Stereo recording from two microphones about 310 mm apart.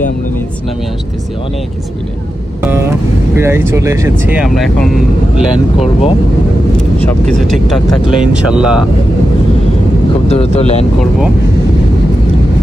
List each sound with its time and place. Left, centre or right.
2.6 s guitar: centre
3.3 s speech: centre
5.8 s speech: centre
7.0 s speech: centre
10.2 s speech: centre